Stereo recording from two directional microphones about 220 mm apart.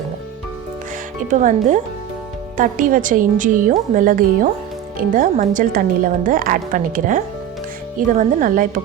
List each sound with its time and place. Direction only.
1.3 s speech: 35° right (ahead or behind)